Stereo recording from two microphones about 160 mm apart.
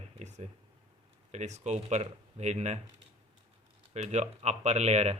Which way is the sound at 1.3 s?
45° right (ahead or behind).